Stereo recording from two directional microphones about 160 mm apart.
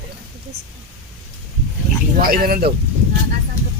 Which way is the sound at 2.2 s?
65° right (ahead or behind).